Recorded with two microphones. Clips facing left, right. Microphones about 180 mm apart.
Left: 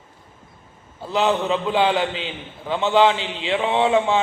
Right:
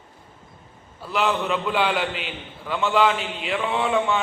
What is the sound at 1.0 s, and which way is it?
A man's voice, 25° left (ahead or behind).